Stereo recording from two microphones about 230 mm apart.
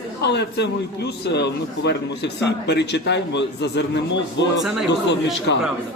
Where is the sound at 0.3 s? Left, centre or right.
Left.